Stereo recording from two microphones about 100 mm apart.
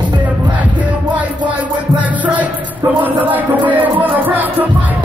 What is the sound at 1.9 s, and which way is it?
Music, 15° right (ahead or behind).